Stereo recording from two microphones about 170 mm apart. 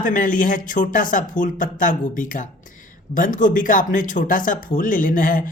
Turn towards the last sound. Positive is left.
turn(degrees=50)  # may be behind; listen again after turning